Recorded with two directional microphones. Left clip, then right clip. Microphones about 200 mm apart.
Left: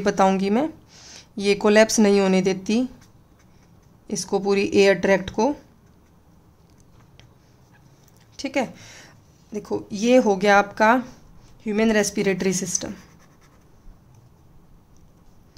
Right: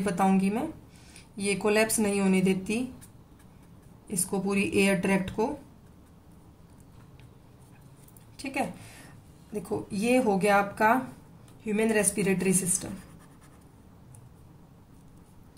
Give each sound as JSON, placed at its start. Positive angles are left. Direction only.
{"t": 0.0, "sound": "speech", "side_deg": 50}
{"t": 4.3, "sound": "speech", "side_deg": 50}
{"t": 8.4, "sound": "speech", "side_deg": 45}